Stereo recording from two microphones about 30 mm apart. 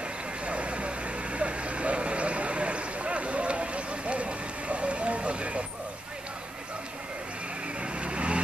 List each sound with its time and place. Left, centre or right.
0.5 s vehicle: right
7.8 s vehicle: right